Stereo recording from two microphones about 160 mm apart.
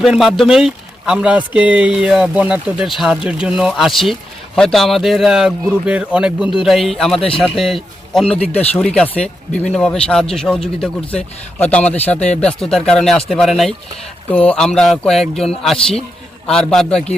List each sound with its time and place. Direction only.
0.0 s speech: centre (ahead or behind)
8.4 s speech: 40° left (ahead or behind)
9.0 s speech: 5° left (ahead or behind)